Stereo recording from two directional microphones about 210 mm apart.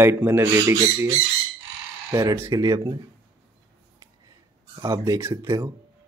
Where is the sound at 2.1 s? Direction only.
15° right (ahead or behind).